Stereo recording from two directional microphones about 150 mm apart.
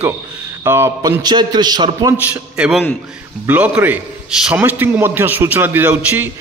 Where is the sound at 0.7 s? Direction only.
20° right (ahead or behind).